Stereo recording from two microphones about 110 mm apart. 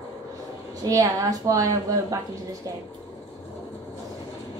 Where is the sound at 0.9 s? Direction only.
30° right (ahead or behind).